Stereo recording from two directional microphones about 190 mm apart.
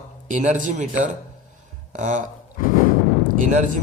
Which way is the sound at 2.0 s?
40° right (ahead or behind).